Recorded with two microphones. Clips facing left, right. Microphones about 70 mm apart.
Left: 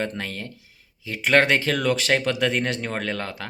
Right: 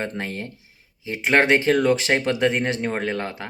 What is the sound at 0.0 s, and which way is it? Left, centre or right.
Speech, right.